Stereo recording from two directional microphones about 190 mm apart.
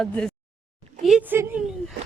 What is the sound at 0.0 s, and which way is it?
A woman's voice, 5° left (ahead or behind).